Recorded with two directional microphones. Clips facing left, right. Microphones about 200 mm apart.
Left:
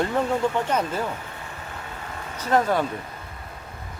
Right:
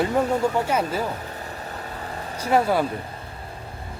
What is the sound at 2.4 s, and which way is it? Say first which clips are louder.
Speech: right 1 dB; 10° right (ahead or behind).